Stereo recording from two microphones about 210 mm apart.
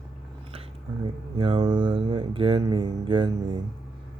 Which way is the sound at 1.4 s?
25° right (ahead or behind).